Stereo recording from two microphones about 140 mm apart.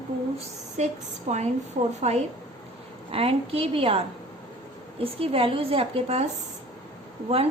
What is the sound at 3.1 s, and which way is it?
A woman's voice, 45° right (ahead or behind).